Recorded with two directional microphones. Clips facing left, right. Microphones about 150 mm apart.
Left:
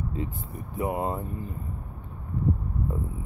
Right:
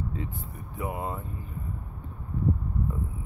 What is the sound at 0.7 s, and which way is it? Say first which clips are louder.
Speech: left 5 dB; 30° left (ahead or behind).